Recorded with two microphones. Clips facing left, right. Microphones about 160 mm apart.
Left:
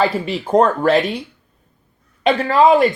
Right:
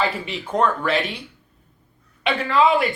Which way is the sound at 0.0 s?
35° left (ahead or behind).